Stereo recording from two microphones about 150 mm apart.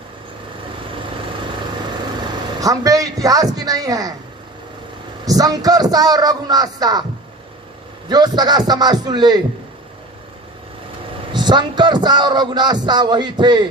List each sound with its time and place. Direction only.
2.6 s a man's voice: 25° right (ahead or behind)
5.2 s a man's voice: 25° right (ahead or behind)
8.1 s a man's voice: 30° right (ahead or behind)
11.3 s a man's voice: 30° right (ahead or behind)